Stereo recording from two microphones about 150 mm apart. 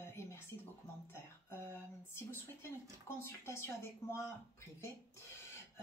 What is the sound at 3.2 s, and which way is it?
Speech, 15° left (ahead or behind).